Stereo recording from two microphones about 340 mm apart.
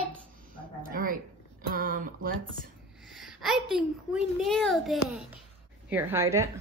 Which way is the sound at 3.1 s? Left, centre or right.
Centre.